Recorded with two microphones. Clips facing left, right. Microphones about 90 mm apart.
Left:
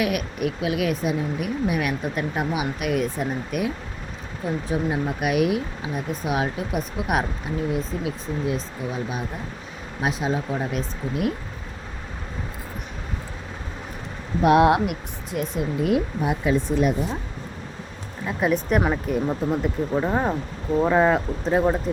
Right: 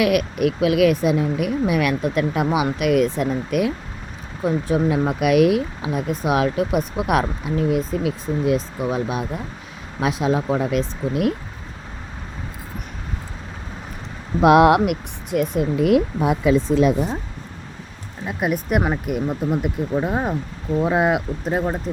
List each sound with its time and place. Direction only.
0.0 s speech: 85° right
7.7 s speech: 70° right (ahead or behind)
14.4 s speech: 90° right
18.3 s speech: 10° right (ahead or behind)